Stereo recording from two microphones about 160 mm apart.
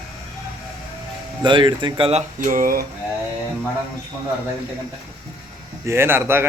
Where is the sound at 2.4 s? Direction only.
55° right (ahead or behind).